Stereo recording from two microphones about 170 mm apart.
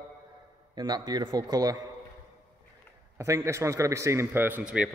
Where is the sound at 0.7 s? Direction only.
25° right (ahead or behind).